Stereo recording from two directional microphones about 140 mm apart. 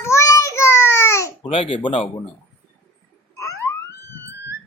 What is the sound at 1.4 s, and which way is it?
Speech, 40° left (ahead or behind).